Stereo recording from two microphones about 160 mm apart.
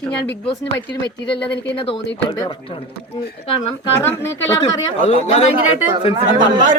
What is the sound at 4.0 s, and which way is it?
Speech, 15° left (ahead or behind).